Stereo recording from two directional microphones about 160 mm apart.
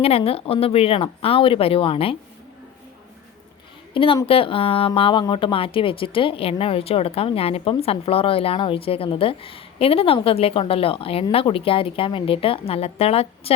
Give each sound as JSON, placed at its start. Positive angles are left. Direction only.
{"t": 0.0, "sound": "speech", "side_deg": 40}
{"t": 3.9, "sound": "a woman's voice", "side_deg": 35}